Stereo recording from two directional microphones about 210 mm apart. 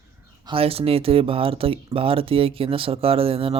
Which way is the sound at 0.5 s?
25° right (ahead or behind).